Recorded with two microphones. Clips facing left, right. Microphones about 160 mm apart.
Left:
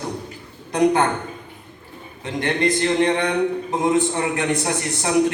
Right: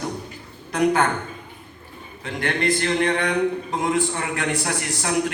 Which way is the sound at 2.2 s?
20° left (ahead or behind).